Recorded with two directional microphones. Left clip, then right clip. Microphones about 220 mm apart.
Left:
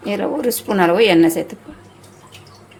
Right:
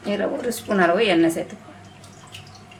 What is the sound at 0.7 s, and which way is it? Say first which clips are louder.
Speech: left 4 dB; 35° left (ahead or behind).